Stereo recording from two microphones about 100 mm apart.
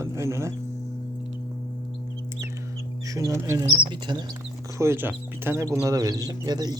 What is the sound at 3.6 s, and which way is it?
Speech, 50° right (ahead or behind).